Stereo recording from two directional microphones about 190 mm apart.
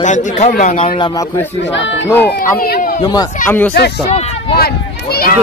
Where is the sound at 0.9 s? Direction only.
25° left (ahead or behind).